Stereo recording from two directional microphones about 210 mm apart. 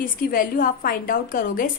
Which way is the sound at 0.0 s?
45° left (ahead or behind).